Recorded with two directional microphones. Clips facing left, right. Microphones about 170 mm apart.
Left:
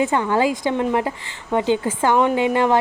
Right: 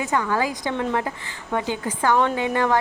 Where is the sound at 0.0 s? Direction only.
25° left (ahead or behind).